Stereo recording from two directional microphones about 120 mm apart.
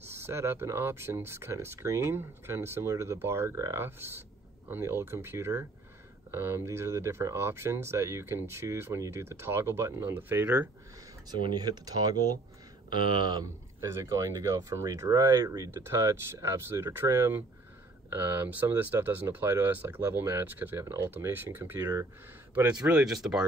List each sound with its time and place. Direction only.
0.1 s speech: 20° right (ahead or behind)
11.2 s speech: 40° right (ahead or behind)
13.7 s speech: 25° right (ahead or behind); by 23.4 s 5° right (ahead or behind)